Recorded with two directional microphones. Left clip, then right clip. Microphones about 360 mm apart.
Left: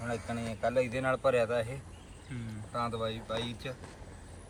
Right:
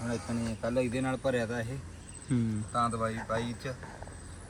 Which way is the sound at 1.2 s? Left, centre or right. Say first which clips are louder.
Left 5 dB; centre.